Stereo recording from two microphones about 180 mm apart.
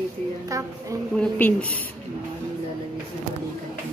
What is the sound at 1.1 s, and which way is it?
Speech, 10° left (ahead or behind).